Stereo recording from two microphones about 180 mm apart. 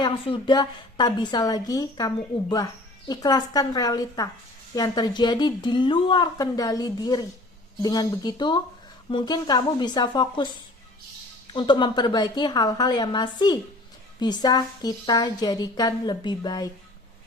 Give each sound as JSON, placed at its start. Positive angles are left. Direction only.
{"t": 0.0, "sound": "a woman's voice", "side_deg": 25}